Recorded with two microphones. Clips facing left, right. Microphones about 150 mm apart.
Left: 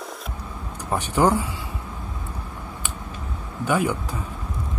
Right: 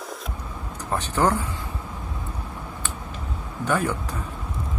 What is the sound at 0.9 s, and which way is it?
Speech, 10° left (ahead or behind).